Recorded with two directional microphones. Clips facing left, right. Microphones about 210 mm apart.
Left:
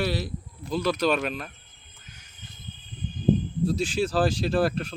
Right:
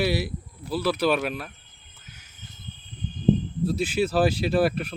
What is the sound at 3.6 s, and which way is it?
Speech, 5° right (ahead or behind).